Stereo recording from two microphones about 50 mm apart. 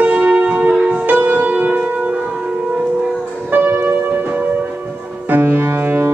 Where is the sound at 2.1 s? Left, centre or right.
Centre.